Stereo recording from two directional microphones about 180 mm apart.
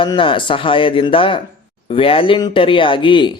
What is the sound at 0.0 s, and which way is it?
Speech, 25° left (ahead or behind).